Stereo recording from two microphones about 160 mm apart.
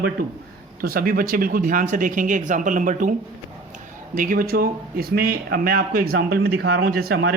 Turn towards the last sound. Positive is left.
turn(degrees=-75)  # may be behind; listen again after turning